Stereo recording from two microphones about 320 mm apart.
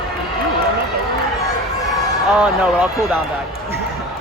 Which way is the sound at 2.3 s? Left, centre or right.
Centre.